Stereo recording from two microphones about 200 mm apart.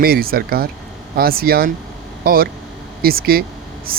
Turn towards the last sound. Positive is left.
turn(degrees=-45)  # may be behind; listen again after turning